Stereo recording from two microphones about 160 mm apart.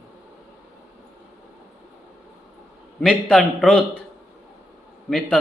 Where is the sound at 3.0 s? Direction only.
5° left (ahead or behind).